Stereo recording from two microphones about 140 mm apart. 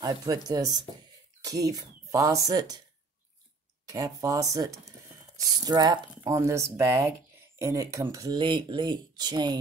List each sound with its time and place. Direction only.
0.0 s speech: 25° right (ahead or behind)
3.9 s speech: 25° right (ahead or behind)